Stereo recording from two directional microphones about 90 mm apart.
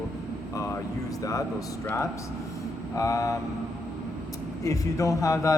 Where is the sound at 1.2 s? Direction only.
40° left (ahead or behind).